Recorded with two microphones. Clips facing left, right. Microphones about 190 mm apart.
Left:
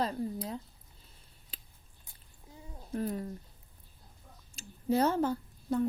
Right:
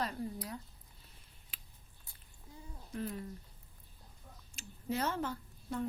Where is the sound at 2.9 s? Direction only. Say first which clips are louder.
Left 6 dB; 35° left (ahead or behind).